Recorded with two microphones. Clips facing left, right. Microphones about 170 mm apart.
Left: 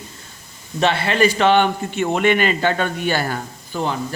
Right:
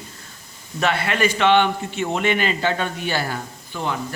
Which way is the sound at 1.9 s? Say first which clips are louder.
Left 4 dB; 55° left (ahead or behind).